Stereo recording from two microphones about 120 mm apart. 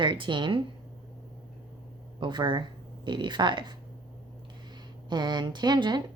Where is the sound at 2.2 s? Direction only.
40° right (ahead or behind).